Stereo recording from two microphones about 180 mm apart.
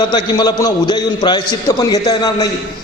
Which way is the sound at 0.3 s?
20° left (ahead or behind).